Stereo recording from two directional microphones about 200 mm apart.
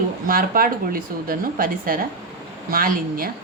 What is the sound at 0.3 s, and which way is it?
A woman's voice, 45° right (ahead or behind).